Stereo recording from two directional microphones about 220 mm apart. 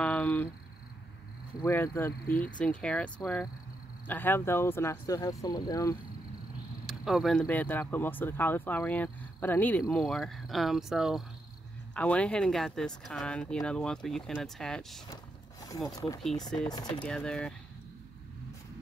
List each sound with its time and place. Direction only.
0.0 s speech: 5° left (ahead or behind)
1.6 s speech: 10° left (ahead or behind)
6.9 s speech: centre (ahead or behind)
15.9 s speech: 15° left (ahead or behind)
17.0 s speech: 5° left (ahead or behind)